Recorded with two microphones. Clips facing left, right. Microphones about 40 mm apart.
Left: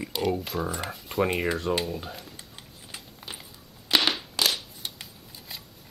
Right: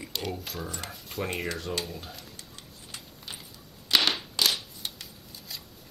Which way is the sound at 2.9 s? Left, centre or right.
Centre.